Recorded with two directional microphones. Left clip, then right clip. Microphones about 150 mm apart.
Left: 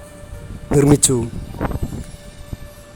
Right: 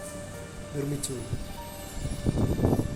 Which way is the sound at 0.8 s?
90° left.